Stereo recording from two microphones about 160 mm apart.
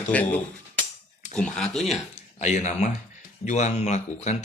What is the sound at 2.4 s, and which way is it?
Speech, 45° left (ahead or behind).